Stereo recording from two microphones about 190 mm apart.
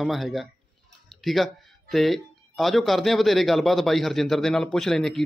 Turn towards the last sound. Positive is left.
turn(degrees=0)  # may be behind; listen again after turning